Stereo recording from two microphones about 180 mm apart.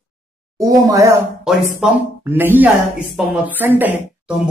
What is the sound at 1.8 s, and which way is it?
Speech, 5° right (ahead or behind).